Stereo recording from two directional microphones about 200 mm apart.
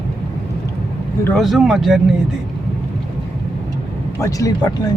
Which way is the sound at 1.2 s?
Centre (ahead or behind).